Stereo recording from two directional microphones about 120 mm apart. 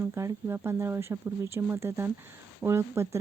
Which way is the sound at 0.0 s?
25° right (ahead or behind).